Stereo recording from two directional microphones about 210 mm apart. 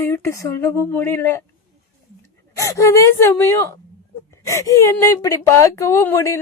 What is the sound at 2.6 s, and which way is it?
A woman's voice, 15° left (ahead or behind).